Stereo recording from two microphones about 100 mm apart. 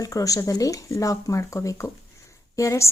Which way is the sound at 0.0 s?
35° left (ahead or behind).